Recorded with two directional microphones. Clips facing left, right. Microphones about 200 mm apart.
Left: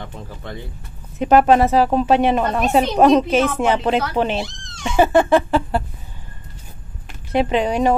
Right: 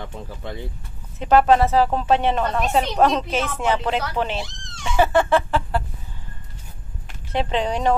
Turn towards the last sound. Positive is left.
turn(degrees=10)  # may be behind; listen again after turning